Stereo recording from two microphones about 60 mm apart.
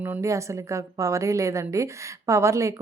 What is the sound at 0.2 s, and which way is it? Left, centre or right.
A woman's voice, right.